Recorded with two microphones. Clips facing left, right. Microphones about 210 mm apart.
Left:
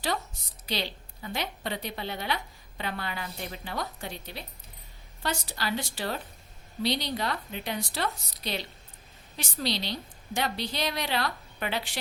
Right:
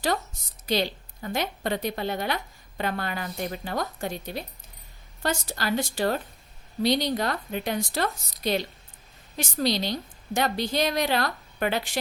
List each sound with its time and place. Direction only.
0.6 s a woman's voice: 45° right (ahead or behind)